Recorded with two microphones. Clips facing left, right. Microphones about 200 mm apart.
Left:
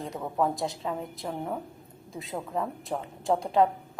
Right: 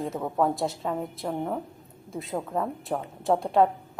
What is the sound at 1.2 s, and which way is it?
Speech, 45° right (ahead or behind).